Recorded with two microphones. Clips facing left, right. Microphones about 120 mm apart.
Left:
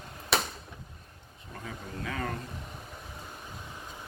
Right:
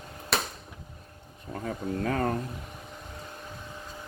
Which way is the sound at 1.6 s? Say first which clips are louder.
Right 9 dB; 45° right (ahead or behind).